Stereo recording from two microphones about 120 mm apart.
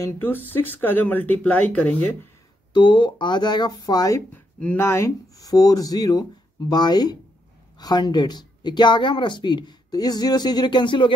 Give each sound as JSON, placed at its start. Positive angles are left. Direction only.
{"t": 0.0, "sound": "speech", "side_deg": 15}
{"t": 2.7, "sound": "speech", "side_deg": 40}
{"t": 4.3, "sound": "speech", "side_deg": 15}